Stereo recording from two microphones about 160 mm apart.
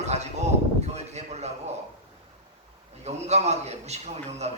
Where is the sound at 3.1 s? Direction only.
45° right (ahead or behind).